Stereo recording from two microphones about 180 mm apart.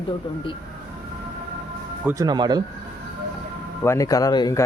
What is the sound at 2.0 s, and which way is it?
Speech, 20° right (ahead or behind).